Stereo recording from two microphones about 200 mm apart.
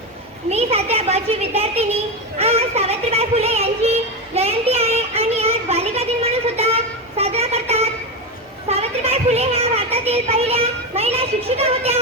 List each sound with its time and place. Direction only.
0.5 s a sound: 30° right (ahead or behind)
2.4 s music: 30° right (ahead or behind)
4.4 s child singing: 30° right (ahead or behind)
8.7 s children playing: 30° right (ahead or behind)